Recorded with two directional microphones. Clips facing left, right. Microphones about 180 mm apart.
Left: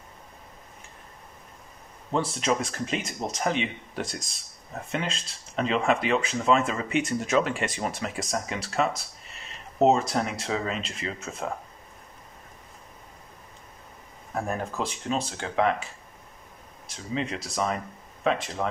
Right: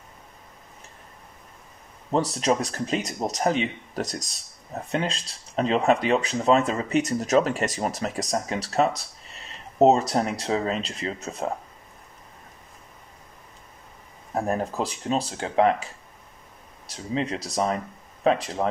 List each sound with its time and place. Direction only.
2.1 s speech: 40° right (ahead or behind)
14.3 s speech: 35° right (ahead or behind)
16.9 s speech: 35° right (ahead or behind)